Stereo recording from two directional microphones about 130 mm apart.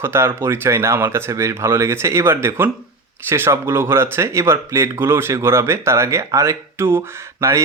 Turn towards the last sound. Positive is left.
turn(degrees=-20)  # may be behind; listen again after turning